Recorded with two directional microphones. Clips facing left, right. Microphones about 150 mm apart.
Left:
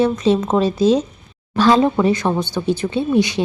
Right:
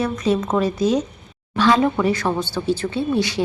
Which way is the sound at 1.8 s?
25° left (ahead or behind).